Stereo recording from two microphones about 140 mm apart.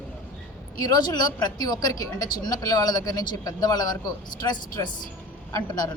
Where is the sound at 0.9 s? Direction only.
30° left (ahead or behind).